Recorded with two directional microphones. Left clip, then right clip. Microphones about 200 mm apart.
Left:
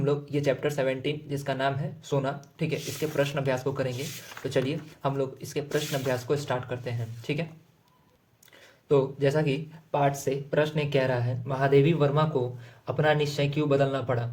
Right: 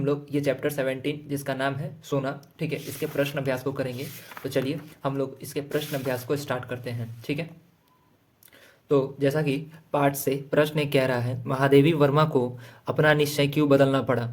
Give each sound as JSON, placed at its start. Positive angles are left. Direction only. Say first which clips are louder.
{"t": 0.0, "sound": "speech", "louder": "right 1 dB", "side_deg": -5}
{"t": 8.9, "sound": "speech", "louder": "right 1 dB", "side_deg": -10}
{"t": 9.9, "sound": "speech", "louder": "right 2 dB", "side_deg": -20}